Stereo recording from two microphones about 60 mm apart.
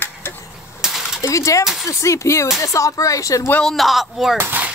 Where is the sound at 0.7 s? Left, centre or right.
Centre.